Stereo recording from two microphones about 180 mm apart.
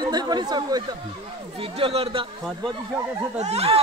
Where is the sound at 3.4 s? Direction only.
35° right (ahead or behind).